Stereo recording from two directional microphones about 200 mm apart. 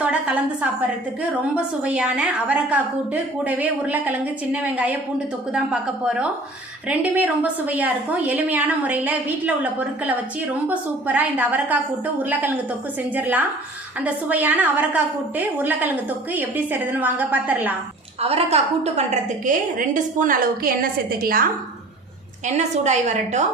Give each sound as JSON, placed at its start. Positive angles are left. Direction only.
{"t": 0.0, "sound": "a woman's voice", "side_deg": -5}
{"t": 10.7, "sound": "a woman's voice", "side_deg": -10}
{"t": 18.2, "sound": "a woman's voice", "side_deg": -30}
{"t": 22.4, "sound": "a woman's voice", "side_deg": -35}